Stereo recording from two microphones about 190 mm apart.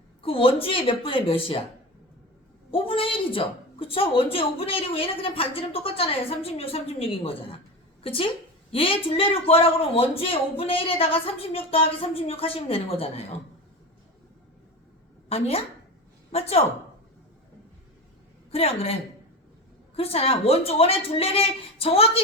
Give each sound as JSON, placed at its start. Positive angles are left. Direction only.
{"t": 0.2, "sound": "a woman's voice", "side_deg": 30}
{"t": 2.7, "sound": "a woman's voice", "side_deg": 30}
{"t": 15.3, "sound": "speech", "side_deg": 30}
{"t": 18.5, "sound": "speech", "side_deg": 30}
{"t": 20.0, "sound": "speech", "side_deg": 30}